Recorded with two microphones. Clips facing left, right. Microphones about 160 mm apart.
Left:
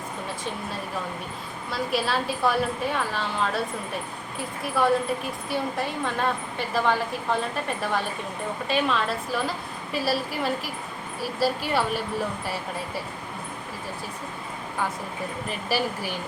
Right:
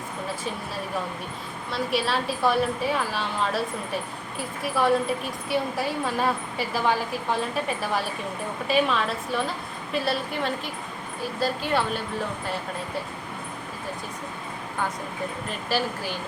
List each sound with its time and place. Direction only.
1.7 s a woman's voice: centre (ahead or behind)